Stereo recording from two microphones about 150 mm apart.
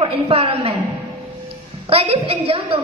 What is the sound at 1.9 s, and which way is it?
Speech, 40° right (ahead or behind).